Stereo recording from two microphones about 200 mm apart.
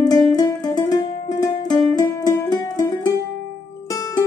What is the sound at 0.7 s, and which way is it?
Music, 20° left (ahead or behind).